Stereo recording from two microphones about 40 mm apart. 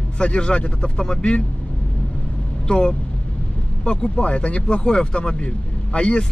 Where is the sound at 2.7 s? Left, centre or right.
Left.